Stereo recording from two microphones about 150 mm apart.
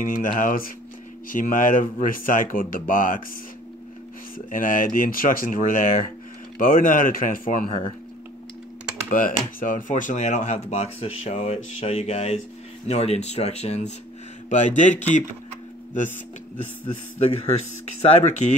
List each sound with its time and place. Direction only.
0.0 s speech: 65° left (ahead or behind)
4.5 s speech: 65° left (ahead or behind)
9.1 s speech: 65° left (ahead or behind)
16.8 s a man's voice: 40° left (ahead or behind)
18.0 s speech: 50° left (ahead or behind)